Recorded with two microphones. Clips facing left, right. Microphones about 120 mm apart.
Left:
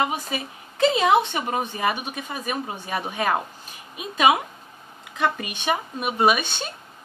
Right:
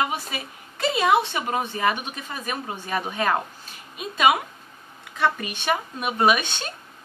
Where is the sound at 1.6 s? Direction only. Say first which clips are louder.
Right 1 dB; 10° left (ahead or behind).